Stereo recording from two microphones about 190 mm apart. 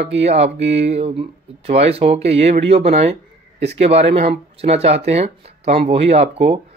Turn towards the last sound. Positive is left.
turn(degrees=-30)  # may be behind; listen again after turning